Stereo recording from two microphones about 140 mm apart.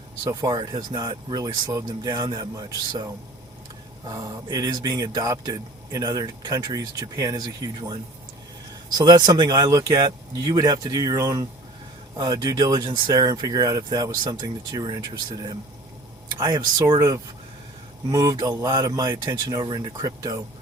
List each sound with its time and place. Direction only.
0.3 s speech: 25° right (ahead or behind)
9.0 s speech: 30° right (ahead or behind)